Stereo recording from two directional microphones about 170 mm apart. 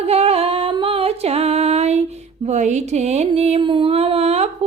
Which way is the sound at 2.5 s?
45° right (ahead or behind).